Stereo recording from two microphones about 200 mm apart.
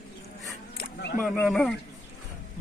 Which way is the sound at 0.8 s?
55° left (ahead or behind).